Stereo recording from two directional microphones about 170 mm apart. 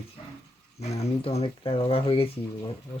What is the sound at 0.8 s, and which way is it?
Speech, 40° left (ahead or behind).